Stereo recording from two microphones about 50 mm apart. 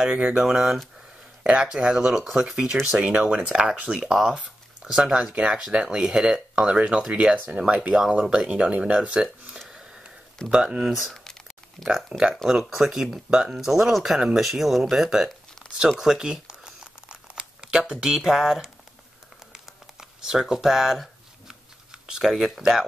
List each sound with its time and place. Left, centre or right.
0.0 s speech: centre
1.4 s speech: right
8.5 s speech: right
9.7 s wheeze: centre
10.5 s speech: centre
12.1 s speech: centre
12.4 s speech: centre
15.6 s crumpling: centre
19.5 s a sound: centre
22.6 s speech: centre